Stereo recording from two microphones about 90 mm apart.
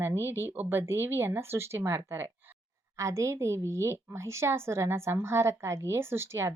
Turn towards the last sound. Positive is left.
turn(degrees=-30)  # may be behind; listen again after turning